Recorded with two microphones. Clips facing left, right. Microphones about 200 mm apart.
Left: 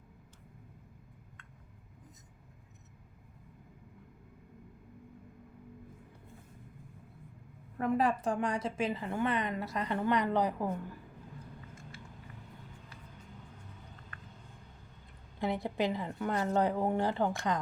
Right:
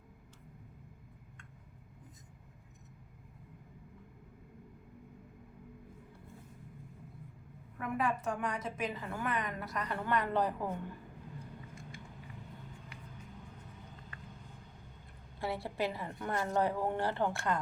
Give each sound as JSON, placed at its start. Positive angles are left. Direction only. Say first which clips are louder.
{"t": 7.8, "sound": "a woman's voice", "louder": "left 5 dB", "side_deg": 35}
{"t": 15.4, "sound": "speech", "louder": "left 3 dB", "side_deg": 20}